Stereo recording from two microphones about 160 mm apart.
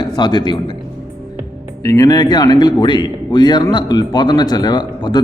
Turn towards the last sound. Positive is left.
turn(degrees=25)  # may be behind; listen again after turning